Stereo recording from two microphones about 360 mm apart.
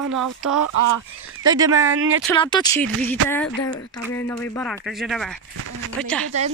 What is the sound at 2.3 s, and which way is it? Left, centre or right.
Speech, centre.